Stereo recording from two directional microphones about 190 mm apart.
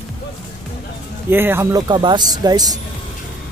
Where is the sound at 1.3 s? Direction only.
10° right (ahead or behind).